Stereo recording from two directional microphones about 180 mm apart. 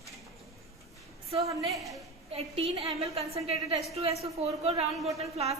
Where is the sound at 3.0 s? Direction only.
35° right (ahead or behind).